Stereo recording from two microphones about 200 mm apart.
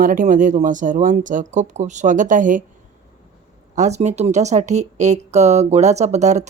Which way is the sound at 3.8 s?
35° right (ahead or behind).